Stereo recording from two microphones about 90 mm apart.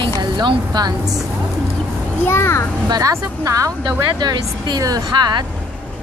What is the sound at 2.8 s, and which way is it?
Speech, 45° right (ahead or behind).